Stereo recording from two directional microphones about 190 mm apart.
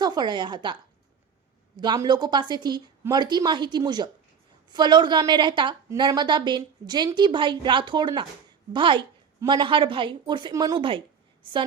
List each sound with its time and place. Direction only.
0.0 s a woman's voice: 20° right (ahead or behind)